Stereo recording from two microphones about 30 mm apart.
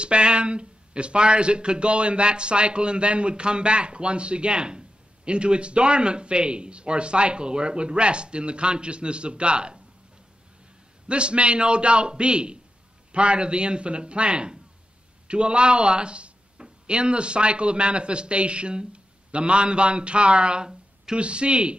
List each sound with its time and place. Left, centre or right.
0.0 s speech: right
11.1 s speech: right